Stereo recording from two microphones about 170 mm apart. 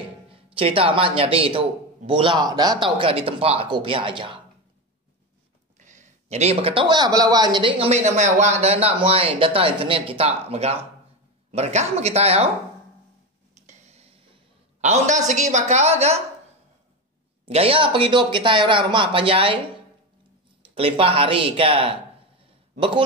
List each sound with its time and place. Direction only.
0.3 s a man's voice: 30° right (ahead or behind)
5.8 s a man's voice: 45° right (ahead or behind)
13.6 s a sound: 45° right (ahead or behind)
17.5 s a man's voice: 35° right (ahead or behind)
20.7 s a man's voice: 35° right (ahead or behind)
22.4 s a sound: 30° right (ahead or behind)